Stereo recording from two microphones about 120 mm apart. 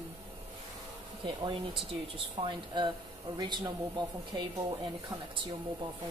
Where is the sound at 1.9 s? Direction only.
45° right (ahead or behind).